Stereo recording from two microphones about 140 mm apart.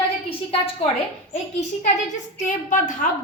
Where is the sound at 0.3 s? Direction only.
40° left (ahead or behind).